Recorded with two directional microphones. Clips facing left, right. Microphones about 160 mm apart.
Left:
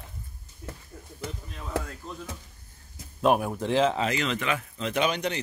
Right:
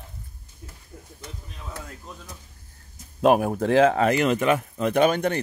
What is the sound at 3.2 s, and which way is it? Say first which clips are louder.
Speech: right 5 dB; 50° right (ahead or behind).